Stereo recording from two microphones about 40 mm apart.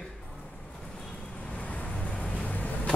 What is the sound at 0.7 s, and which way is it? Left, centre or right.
Vehicle, centre.